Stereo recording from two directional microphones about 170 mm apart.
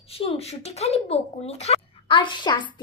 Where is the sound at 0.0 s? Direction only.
35° left (ahead or behind).